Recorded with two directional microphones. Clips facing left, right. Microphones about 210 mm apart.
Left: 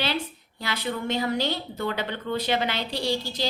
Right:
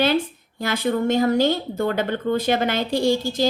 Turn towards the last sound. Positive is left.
turn(degrees=-50)  # may be behind; listen again after turning